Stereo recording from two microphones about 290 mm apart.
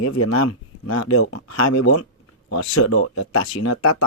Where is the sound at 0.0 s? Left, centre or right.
Left.